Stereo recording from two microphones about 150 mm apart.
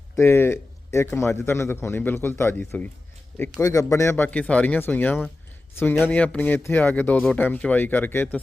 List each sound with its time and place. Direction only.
0.2 s a man's voice: 15° left (ahead or behind)